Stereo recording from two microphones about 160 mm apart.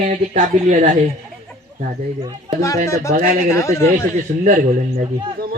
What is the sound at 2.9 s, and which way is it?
Speech, 20° left (ahead or behind).